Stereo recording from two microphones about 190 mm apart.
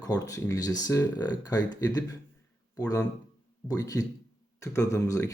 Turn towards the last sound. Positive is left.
turn(degrees=15)  # may be behind; listen again after turning